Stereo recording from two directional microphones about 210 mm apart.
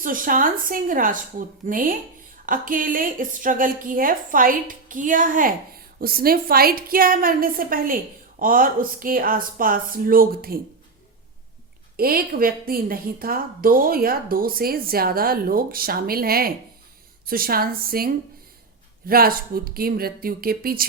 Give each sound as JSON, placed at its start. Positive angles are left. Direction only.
{"t": 0.0, "sound": "a woman's voice", "side_deg": -40}
{"t": 11.9, "sound": "a woman's voice", "side_deg": -45}